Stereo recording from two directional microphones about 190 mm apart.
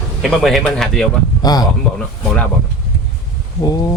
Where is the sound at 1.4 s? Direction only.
20° left (ahead or behind).